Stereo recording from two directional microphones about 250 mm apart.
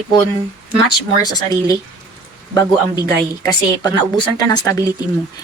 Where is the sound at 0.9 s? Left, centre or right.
Centre.